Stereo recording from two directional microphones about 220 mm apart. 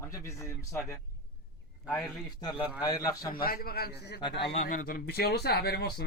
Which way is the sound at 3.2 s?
40° left (ahead or behind).